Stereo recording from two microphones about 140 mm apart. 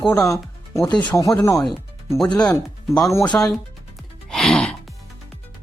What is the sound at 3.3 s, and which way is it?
Speech, 15° left (ahead or behind).